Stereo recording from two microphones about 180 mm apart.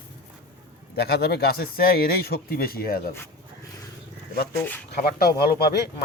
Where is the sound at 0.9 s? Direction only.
60° left (ahead or behind).